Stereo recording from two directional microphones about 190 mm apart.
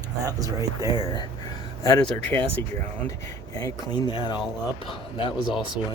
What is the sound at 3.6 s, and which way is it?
Speech, 25° left (ahead or behind).